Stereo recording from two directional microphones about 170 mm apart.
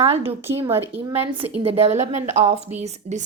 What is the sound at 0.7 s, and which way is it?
Speech, 15° right (ahead or behind).